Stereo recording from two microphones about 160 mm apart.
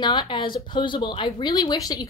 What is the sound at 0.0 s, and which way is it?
Speech, 30° left (ahead or behind).